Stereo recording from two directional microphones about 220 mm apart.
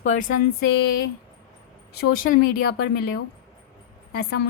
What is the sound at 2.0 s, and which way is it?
A woman's voice, 40° left (ahead or behind).